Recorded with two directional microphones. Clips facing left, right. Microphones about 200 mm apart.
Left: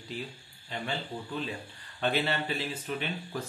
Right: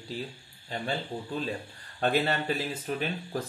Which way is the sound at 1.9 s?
45° right (ahead or behind).